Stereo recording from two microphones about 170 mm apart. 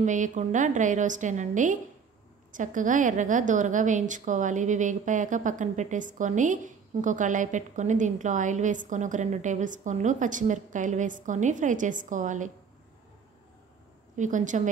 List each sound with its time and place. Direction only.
0.0 s a woman's voice: 45° right (ahead or behind)
14.1 s a woman's voice: 45° right (ahead or behind)